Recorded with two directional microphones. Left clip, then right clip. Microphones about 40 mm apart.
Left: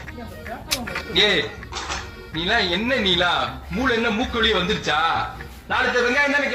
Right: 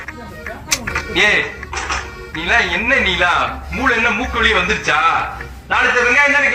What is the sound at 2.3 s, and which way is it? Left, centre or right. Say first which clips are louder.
A man's voice: right 6 dB; left.